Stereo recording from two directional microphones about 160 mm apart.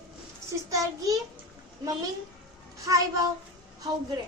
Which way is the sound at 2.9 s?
20° right (ahead or behind).